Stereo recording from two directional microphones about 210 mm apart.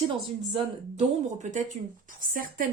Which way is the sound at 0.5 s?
30° right (ahead or behind).